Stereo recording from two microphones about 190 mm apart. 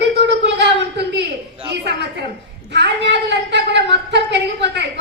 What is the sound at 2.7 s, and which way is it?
A woman's voice, 65° right (ahead or behind).